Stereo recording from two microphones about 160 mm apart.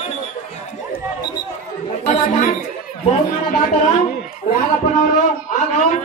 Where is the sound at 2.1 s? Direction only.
55° left (ahead or behind).